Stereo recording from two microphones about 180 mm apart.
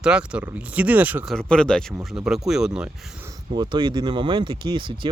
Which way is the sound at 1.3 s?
5° left (ahead or behind).